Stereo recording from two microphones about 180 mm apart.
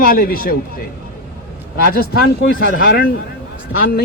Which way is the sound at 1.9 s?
55° left (ahead or behind).